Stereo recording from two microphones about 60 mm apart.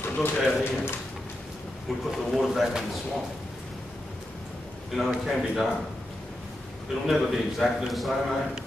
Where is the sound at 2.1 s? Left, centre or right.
Centre.